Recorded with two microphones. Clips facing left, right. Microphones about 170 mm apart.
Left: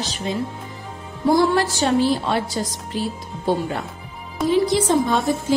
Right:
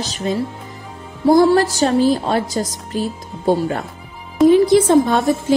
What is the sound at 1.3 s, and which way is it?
A woman's voice, 40° right (ahead or behind).